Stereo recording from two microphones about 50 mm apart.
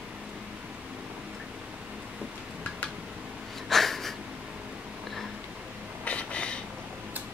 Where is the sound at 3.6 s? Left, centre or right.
Centre.